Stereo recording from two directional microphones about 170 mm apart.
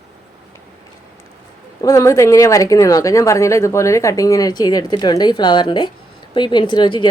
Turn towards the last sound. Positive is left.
turn(degrees=25)  # may be behind; listen again after turning